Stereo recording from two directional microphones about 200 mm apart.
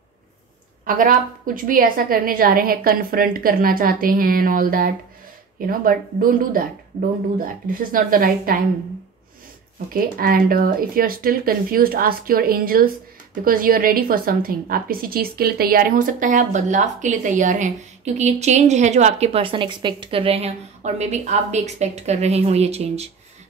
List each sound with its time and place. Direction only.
0.8 s a woman's voice: 45° right (ahead or behind)
9.8 s speech: 45° right (ahead or behind)